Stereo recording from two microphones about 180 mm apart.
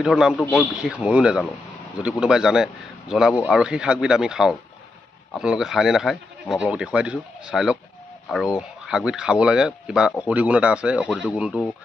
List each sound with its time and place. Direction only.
0.0 s speech: 5° right (ahead or behind)